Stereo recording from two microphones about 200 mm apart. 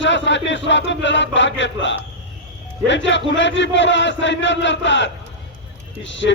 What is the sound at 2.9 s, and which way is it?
Speech, 65° left (ahead or behind).